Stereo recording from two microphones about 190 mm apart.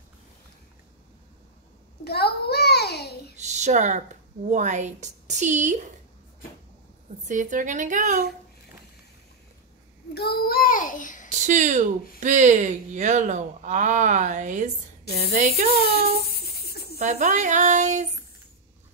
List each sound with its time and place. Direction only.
2.0 s a sound: 55° left (ahead or behind)
3.3 s speech: 40° right (ahead or behind)
7.2 s speech: 40° right (ahead or behind)
10.1 s a child's voice: 55° left (ahead or behind)
11.2 s speech: 40° right (ahead or behind)
15.7 s speech: 55° right (ahead or behind)
16.3 s a sound: 55° left (ahead or behind)
17.0 s speech: 40° right (ahead or behind)